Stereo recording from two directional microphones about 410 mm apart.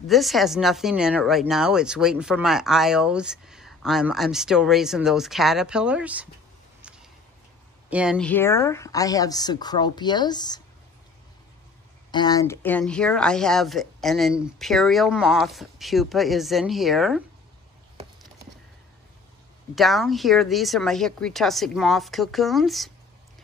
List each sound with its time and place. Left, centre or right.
0.0 s speech: centre
6.8 s a sound: centre
7.9 s speech: centre
12.1 s speech: centre
19.7 s speech: centre